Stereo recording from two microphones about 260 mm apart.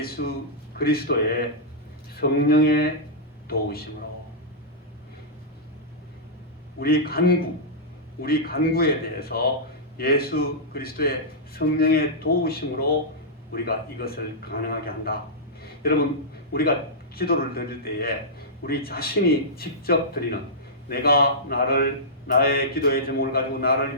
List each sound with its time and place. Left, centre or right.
0.0 s a man's voice: left
6.7 s a man's voice: left
15.6 s a sound: left
16.5 s a man's voice: left